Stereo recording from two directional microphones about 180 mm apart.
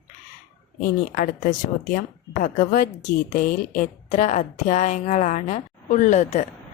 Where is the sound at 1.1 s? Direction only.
45° left (ahead or behind).